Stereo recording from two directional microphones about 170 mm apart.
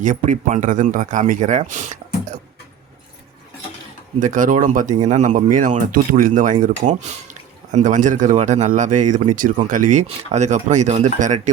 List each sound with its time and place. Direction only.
0.0 s speech: 50° right (ahead or behind)
4.2 s speech: 50° right (ahead or behind)